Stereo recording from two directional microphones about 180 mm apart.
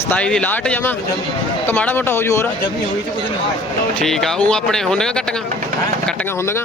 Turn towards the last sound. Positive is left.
turn(degrees=5)  # may be behind; listen again after turning